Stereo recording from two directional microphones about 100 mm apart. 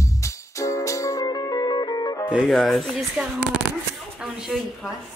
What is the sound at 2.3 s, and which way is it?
Speech, centre (ahead or behind).